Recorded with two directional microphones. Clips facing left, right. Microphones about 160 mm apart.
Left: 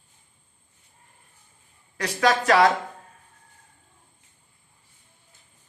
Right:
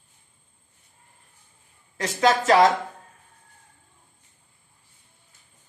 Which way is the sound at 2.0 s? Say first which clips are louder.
Right 1 dB; 25° right (ahead or behind).